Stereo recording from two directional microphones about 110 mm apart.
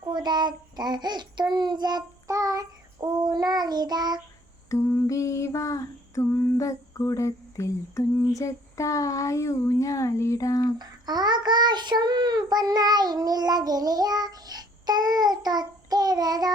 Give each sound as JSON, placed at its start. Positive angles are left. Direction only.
{"t": 0.0, "sound": "child singing", "side_deg": -40}
{"t": 4.9, "sound": "female singing", "side_deg": 25}
{"t": 10.8, "sound": "child singing", "side_deg": -40}